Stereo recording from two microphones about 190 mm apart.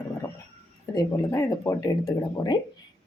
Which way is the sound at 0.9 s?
15° left (ahead or behind).